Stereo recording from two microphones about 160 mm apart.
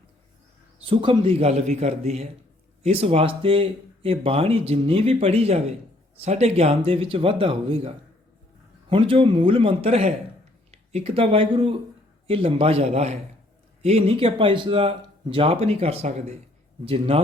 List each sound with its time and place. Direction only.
0.9 s speech: 35° right (ahead or behind)